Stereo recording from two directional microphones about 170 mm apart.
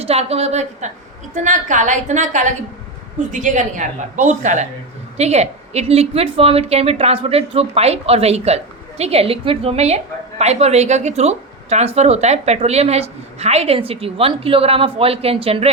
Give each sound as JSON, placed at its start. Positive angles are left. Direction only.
{"t": 0.0, "sound": "a woman's voice", "side_deg": -35}